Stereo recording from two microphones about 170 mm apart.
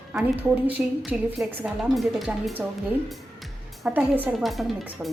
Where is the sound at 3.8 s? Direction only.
10° right (ahead or behind).